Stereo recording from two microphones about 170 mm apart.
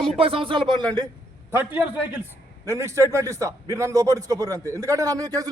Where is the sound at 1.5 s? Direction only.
10° right (ahead or behind).